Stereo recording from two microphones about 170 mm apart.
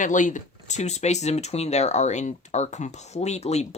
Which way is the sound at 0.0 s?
50° left (ahead or behind).